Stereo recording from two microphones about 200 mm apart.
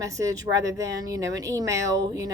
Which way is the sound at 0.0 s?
15° right (ahead or behind).